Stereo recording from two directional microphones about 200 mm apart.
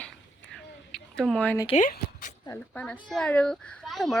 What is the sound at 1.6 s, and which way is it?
Speech, 35° left (ahead or behind).